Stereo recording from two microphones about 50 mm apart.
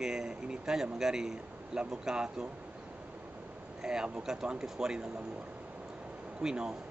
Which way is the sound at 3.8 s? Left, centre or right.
Centre.